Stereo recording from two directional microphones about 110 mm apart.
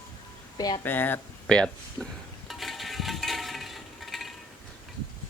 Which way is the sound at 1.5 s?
10° left (ahead or behind).